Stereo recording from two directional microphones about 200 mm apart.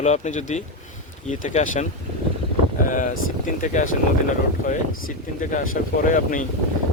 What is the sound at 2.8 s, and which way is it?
Speech, 40° left (ahead or behind).